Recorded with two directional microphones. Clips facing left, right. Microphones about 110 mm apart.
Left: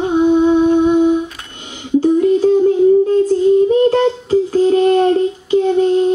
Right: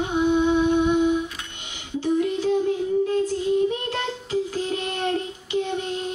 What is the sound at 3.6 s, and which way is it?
Child singing, 40° left (ahead or behind).